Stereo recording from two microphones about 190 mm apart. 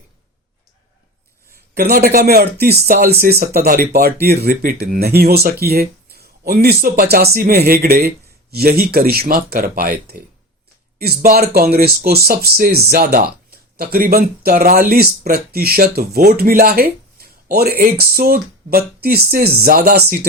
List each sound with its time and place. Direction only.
1.7 s speech: 50° right (ahead or behind)